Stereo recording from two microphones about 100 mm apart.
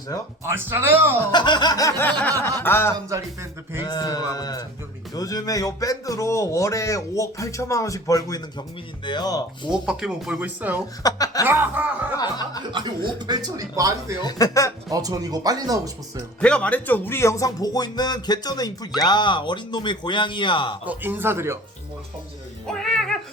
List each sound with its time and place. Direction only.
0.4 s speech: 25° right (ahead or behind)
1.3 s speech: 50° left (ahead or behind)
2.6 s speech: 20° left (ahead or behind)
3.8 s speech: 40° left (ahead or behind)
9.7 s speech: 10° right (ahead or behind)
11.0 s speech: 35° left (ahead or behind)
11.4 s speech: 20° right (ahead or behind)
12.1 s speech: 45° left (ahead or behind)
12.7 s speech: 50° right (ahead or behind)
14.2 s speech: 40° left (ahead or behind)
14.8 s speech: 35° right (ahead or behind)
16.4 s speech: 10° left (ahead or behind); by 20.7 s 55° left (ahead or behind)
20.8 s speech: 20° right (ahead or behind)
22.6 s speech: 5° left (ahead or behind)